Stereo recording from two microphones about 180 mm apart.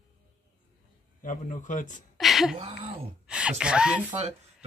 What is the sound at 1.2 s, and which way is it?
Speech, 45° left (ahead or behind).